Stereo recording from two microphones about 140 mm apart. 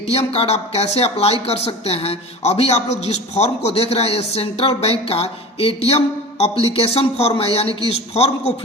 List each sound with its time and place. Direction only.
0.1 s speech: 50° left (ahead or behind)